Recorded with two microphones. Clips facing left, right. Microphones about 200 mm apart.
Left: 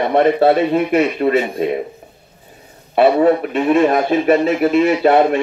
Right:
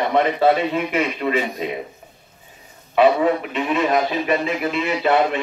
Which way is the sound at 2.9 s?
45° left (ahead or behind).